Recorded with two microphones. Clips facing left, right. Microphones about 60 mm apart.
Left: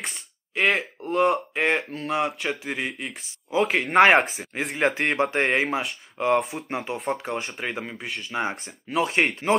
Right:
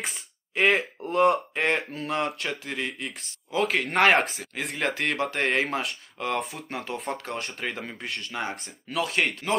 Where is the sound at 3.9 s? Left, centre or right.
Left.